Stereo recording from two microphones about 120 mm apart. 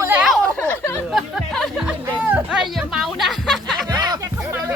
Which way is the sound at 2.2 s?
15° right (ahead or behind).